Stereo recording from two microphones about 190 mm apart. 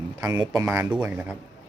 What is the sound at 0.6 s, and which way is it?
Speech, 5° right (ahead or behind).